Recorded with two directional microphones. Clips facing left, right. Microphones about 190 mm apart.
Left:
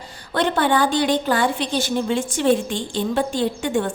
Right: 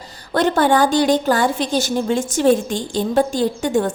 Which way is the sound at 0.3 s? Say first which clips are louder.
Right 4 dB; 40° right (ahead or behind).